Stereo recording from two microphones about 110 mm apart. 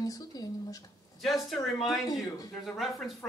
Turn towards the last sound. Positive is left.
turn(degrees=0)  # may be behind; listen again after turning